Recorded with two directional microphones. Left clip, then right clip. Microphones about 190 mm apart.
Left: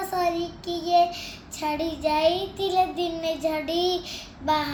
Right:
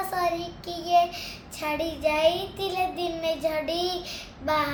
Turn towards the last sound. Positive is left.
turn(degrees=-20)  # may be behind; listen again after turning